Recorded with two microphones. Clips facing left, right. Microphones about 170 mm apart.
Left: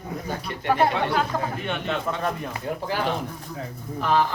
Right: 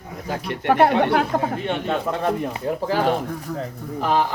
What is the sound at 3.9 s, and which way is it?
Speech, 40° right (ahead or behind).